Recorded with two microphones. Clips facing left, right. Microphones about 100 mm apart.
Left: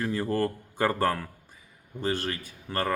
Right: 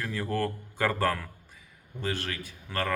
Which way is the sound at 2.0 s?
35° left (ahead or behind).